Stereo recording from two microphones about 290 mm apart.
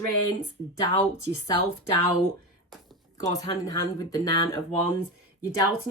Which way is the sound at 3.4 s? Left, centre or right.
Centre.